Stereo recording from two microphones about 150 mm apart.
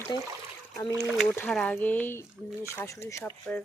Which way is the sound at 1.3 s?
10° left (ahead or behind).